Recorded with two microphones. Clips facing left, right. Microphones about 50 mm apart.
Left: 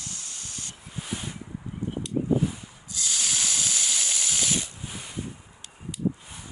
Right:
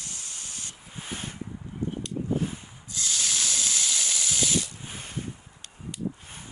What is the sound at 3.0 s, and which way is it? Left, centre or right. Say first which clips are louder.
Hiss: even; left.